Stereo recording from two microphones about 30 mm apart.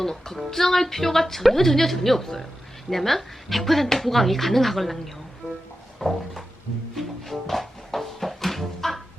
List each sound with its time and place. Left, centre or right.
0.0 s a woman's voice: centre
6.0 s a sound: centre
6.9 s music: centre